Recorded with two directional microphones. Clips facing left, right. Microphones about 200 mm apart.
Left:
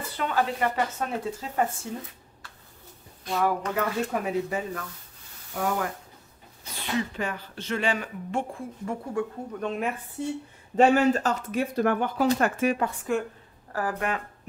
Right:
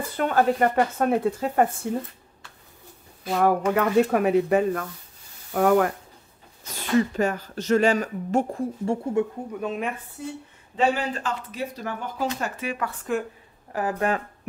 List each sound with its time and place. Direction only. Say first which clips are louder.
0.2 s speech: right 6 dB; 50° right (ahead or behind)
3.3 s speech: right 5 dB; 55° right (ahead or behind)
6.6 s speech: right 7 dB; 45° right (ahead or behind)
8.9 s speech: right 6 dB; 30° right (ahead or behind)
9.5 s speech: right 1 dB; 5° right (ahead or behind)
10.2 s speech: left 5 dB; 25° left (ahead or behind)
10.8 s speech: left 4 dB; 45° left (ahead or behind)
11.7 s speech: left 8 dB; 60° left (ahead or behind)
12.4 s speech: left 6 dB; 50° left (ahead or behind)
13.1 s speech: right 1 dB; centre (ahead or behind)
13.7 s speech: right 3 dB; 20° right (ahead or behind)
13.9 s speech: right 5 dB; 35° right (ahead or behind)